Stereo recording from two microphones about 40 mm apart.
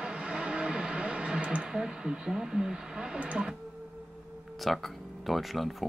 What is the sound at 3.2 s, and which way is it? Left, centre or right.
Music, right.